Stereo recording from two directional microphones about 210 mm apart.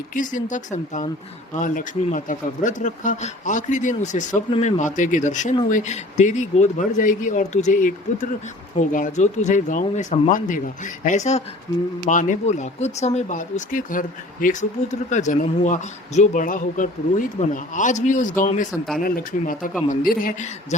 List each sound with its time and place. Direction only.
0.1 s speech: 40° left (ahead or behind)